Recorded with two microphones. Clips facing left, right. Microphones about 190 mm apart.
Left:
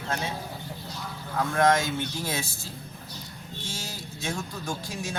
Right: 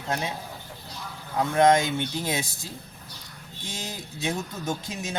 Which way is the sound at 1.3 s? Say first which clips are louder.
Right 3 dB; 20° right (ahead or behind).